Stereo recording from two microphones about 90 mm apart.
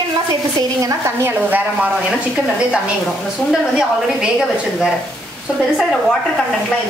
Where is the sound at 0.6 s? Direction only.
40° right (ahead or behind).